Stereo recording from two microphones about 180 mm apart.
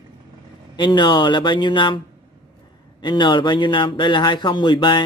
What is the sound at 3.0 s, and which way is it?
A man's voice, 25° left (ahead or behind).